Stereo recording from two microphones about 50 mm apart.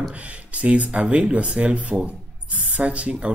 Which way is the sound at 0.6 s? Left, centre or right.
Right.